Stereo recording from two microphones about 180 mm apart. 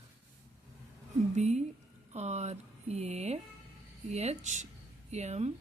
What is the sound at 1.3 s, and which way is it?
Speech, 40° right (ahead or behind).